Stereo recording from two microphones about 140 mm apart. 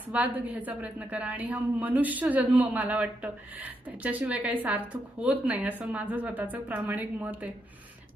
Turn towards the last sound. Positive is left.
turn(degrees=-10)  # may be behind; listen again after turning